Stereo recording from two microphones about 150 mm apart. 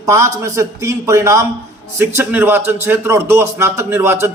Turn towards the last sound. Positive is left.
turn(degrees=-15)  # may be behind; listen again after turning